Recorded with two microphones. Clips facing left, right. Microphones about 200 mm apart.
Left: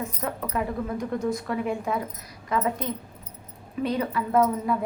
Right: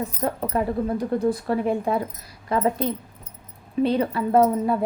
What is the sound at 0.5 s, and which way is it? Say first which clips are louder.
A woman's voice: right 4 dB; 35° right (ahead or behind).